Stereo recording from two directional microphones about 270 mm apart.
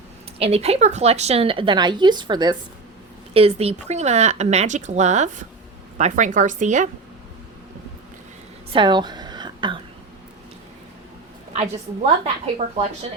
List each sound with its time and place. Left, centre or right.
0.3 s a woman's voice: right
8.7 s a sound: centre
12.2 s a woman's voice: right